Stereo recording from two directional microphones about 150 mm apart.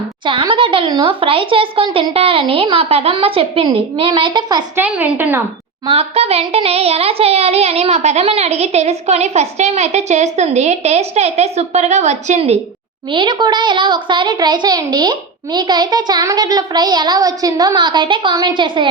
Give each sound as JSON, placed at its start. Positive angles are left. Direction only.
{"t": 0.3, "sound": "speech", "side_deg": -35}
{"t": 4.8, "sound": "a woman's voice", "side_deg": -10}
{"t": 5.9, "sound": "speech", "side_deg": -40}
{"t": 13.1, "sound": "a woman's voice", "side_deg": -30}